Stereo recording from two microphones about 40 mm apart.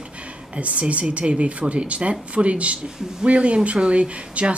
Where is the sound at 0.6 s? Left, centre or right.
Right.